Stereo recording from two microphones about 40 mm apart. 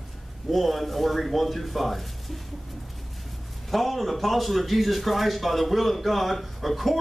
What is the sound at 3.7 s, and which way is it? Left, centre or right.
Speech, centre.